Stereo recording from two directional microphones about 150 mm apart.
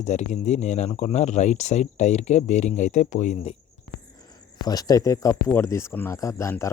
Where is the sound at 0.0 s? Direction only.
50° left (ahead or behind).